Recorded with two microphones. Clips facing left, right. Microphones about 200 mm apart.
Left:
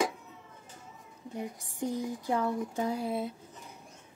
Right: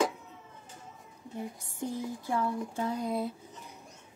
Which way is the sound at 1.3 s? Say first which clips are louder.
Left 1 dB; 15° left (ahead or behind).